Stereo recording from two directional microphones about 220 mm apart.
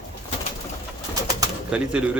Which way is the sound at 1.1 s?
15° right (ahead or behind).